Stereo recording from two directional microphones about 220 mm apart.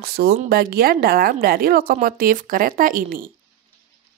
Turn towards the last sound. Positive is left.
turn(degrees=-40)  # may be behind; listen again after turning